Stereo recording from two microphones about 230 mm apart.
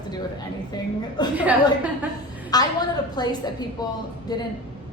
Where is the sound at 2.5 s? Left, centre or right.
Centre.